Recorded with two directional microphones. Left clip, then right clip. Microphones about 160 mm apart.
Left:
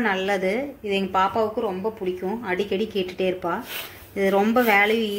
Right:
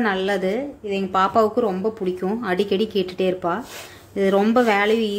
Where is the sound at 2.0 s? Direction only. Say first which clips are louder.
Right 3 dB; 35° right (ahead or behind).